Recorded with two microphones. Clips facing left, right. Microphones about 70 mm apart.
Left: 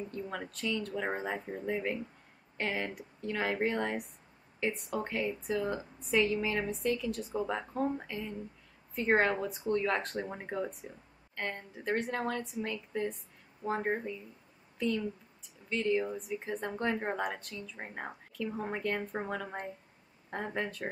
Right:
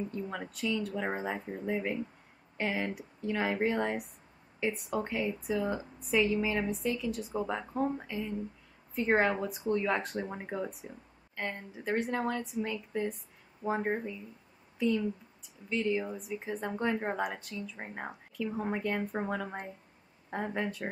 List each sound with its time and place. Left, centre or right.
0.1 s a woman's voice: centre
13.8 s a woman's voice: centre